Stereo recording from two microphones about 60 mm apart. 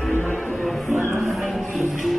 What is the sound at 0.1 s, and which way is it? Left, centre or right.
Music, left.